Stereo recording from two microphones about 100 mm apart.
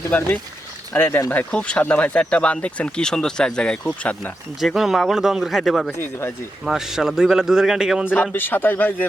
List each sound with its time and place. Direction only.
0.1 s speech: 15° left (ahead or behind)
4.6 s a man's voice: centre (ahead or behind)
6.0 s speech: 25° left (ahead or behind)
6.7 s a man's voice: 5° right (ahead or behind)
8.1 s speech: 15° left (ahead or behind)